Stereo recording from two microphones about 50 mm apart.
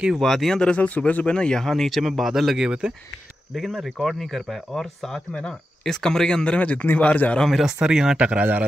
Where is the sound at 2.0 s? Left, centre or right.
Centre.